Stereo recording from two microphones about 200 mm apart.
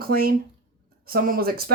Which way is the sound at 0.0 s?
50° right (ahead or behind).